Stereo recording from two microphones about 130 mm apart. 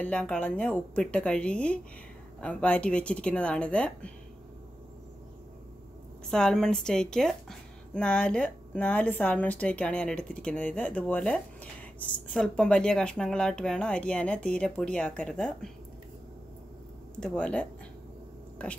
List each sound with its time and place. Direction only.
0.0 s a woman's voice: 10° left (ahead or behind)
6.3 s a woman's voice: 5° left (ahead or behind)
17.1 s a woman's voice: 10° left (ahead or behind)